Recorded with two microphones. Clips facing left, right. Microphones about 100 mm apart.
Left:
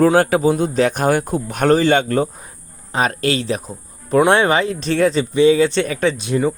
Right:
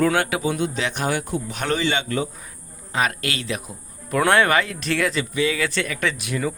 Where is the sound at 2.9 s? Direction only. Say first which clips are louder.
Left 6 dB; 35° left (ahead or behind).